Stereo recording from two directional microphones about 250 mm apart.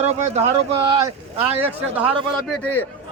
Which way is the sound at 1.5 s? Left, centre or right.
Centre.